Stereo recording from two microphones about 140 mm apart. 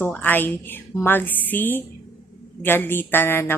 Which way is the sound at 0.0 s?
10° left (ahead or behind).